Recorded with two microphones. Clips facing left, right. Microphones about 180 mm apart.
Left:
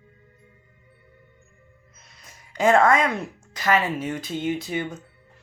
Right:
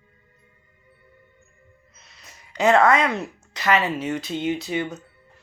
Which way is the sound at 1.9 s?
50° left (ahead or behind).